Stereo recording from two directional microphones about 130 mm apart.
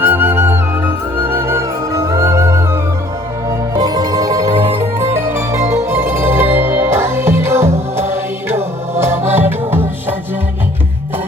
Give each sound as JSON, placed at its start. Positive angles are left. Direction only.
{"t": 0.0, "sound": "music", "side_deg": -15}
{"t": 3.8, "sound": "music", "side_deg": -30}